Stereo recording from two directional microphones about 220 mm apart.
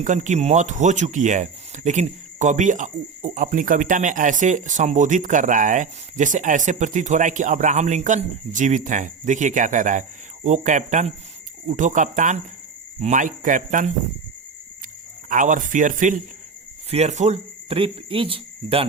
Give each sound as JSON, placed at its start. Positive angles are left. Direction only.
{"t": 0.0, "sound": "speech", "side_deg": -35}
{"t": 15.3, "sound": "speech", "side_deg": -35}
{"t": 16.9, "sound": "cricket", "side_deg": -30}